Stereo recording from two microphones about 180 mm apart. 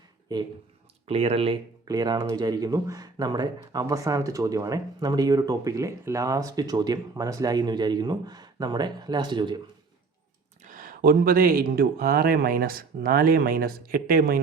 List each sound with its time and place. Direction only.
1.0 s speech: 35° right (ahead or behind)
1.9 s speech: 20° right (ahead or behind)
10.6 s speech: 45° right (ahead or behind)